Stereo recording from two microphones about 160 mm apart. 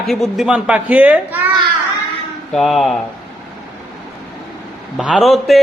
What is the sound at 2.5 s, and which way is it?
Speech, centre (ahead or behind).